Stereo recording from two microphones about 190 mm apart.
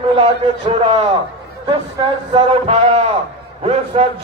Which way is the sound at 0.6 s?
30° right (ahead or behind).